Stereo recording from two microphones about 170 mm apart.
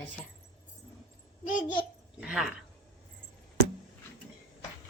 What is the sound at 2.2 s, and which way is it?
Speech, 5° right (ahead or behind).